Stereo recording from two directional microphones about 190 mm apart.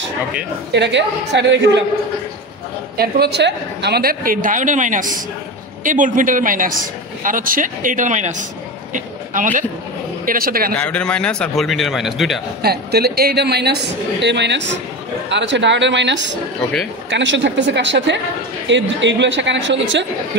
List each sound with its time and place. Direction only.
0.7 s a woman's voice: 65° right (ahead or behind)
3.0 s a man's voice: 60° right (ahead or behind)
10.7 s a man's voice: 5° left (ahead or behind)
12.6 s a woman's voice: 55° right (ahead or behind); by 20.1 s 70° right (ahead or behind)